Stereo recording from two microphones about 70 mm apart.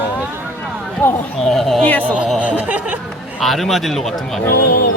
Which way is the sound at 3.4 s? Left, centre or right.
Centre.